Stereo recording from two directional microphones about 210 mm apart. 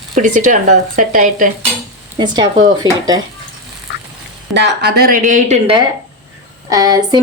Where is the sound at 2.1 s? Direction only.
20° right (ahead or behind).